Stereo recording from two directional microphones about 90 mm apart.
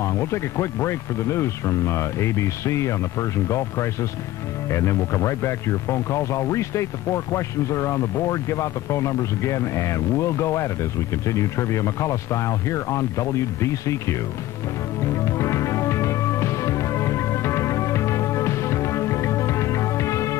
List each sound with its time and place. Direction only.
0.0 s speech: 30° left (ahead or behind)
15.1 s music: 35° left (ahead or behind)